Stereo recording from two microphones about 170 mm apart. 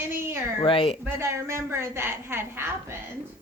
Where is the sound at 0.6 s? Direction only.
30° left (ahead or behind).